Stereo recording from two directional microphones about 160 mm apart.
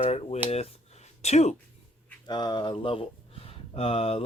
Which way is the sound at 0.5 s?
40° left (ahead or behind).